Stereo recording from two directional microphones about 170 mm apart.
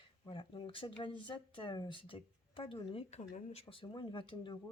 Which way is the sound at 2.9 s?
45° left (ahead or behind).